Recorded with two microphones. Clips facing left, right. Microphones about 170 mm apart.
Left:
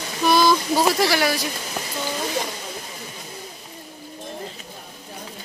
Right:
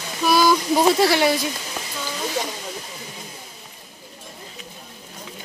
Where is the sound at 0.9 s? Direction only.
25° right (ahead or behind).